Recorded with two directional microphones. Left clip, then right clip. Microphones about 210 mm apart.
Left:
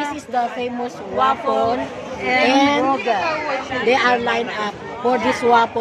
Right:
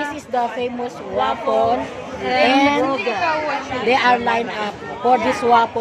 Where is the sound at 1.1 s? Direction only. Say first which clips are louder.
Left 1 dB; 25° left (ahead or behind).